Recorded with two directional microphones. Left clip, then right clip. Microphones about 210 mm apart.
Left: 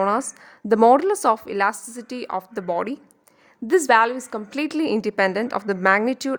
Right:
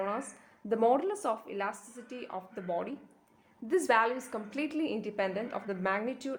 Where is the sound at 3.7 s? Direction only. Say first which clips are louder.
Left 11 dB; 40° left (ahead or behind).